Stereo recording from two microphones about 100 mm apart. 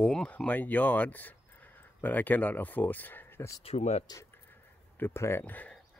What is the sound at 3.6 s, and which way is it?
Speech, 90° left.